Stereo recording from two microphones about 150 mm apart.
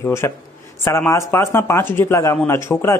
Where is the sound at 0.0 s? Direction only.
15° left (ahead or behind).